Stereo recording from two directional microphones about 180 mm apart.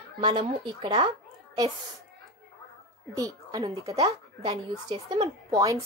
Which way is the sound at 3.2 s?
20° right (ahead or behind).